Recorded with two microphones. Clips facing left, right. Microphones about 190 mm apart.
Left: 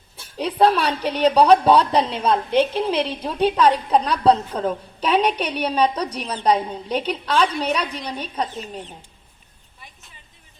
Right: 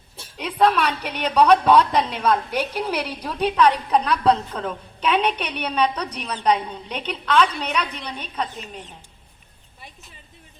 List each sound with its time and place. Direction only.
0.3 s a woman's voice: 30° left (ahead or behind)